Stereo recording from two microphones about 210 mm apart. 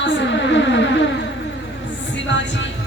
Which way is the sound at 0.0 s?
60° left (ahead or behind).